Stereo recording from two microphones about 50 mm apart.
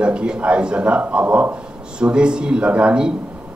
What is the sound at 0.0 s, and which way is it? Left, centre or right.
A man's voice, right.